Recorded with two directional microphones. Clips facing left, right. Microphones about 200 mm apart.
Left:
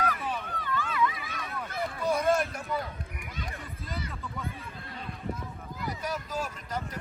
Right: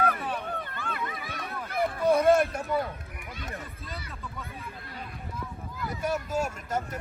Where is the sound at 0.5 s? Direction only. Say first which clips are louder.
Left 3 dB; 55° right (ahead or behind).